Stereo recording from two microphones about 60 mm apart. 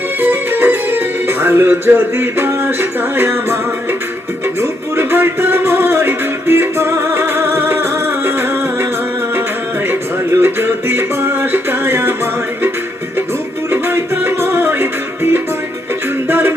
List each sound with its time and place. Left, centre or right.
0.2 s music: right
10.3 s music: right